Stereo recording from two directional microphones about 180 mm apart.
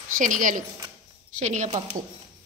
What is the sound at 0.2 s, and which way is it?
Speech, 45° right (ahead or behind).